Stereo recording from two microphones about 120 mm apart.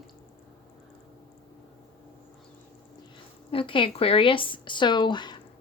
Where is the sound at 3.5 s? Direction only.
45° left (ahead or behind).